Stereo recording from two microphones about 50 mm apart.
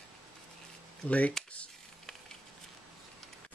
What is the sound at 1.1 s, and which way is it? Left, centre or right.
Speech, left.